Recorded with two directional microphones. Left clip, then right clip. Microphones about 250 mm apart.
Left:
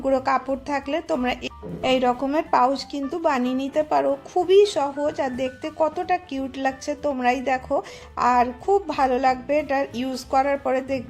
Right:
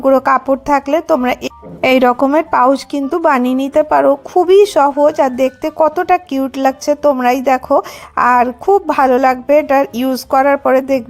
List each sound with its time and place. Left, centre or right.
0.0 s speech: right